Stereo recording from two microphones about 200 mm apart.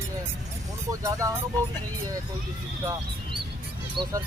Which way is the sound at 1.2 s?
15° right (ahead or behind).